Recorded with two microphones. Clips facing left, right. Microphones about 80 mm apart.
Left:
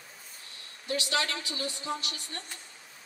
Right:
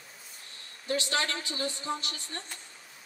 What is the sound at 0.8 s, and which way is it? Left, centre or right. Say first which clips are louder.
Speech: even; right.